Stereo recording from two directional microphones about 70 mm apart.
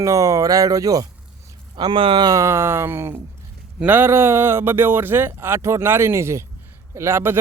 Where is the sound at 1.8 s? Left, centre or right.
Right.